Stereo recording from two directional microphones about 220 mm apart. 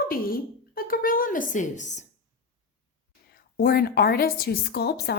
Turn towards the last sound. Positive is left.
turn(degrees=45)  # may be behind; listen again after turning